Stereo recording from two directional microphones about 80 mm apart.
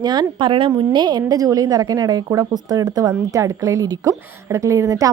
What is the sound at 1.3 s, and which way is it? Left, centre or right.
A woman's voice, right.